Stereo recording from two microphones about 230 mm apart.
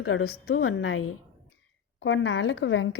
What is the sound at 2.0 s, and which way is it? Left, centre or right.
Speech, left.